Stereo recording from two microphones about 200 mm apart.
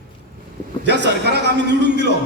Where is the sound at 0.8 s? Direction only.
60° right (ahead or behind).